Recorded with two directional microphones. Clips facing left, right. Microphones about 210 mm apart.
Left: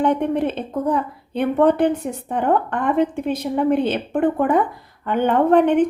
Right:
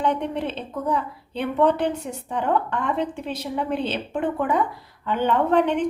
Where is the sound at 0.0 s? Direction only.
55° left (ahead or behind).